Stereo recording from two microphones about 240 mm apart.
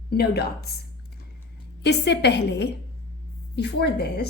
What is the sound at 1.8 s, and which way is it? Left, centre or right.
Speech, left.